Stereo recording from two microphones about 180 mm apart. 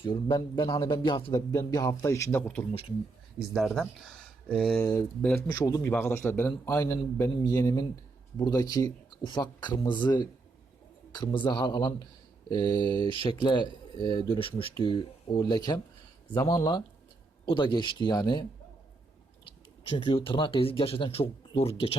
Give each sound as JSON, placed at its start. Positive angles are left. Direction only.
{"t": 0.0, "sound": "a man's voice", "side_deg": 25}
{"t": 4.4, "sound": "speech", "side_deg": 5}
{"t": 4.8, "sound": "a man's voice", "side_deg": 15}
{"t": 20.0, "sound": "speech", "side_deg": 25}